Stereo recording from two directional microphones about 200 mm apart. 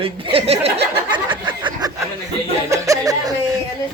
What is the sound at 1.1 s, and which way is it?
Snicker, 25° right (ahead or behind).